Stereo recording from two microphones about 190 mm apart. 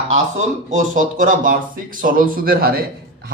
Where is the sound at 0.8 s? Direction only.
45° right (ahead or behind).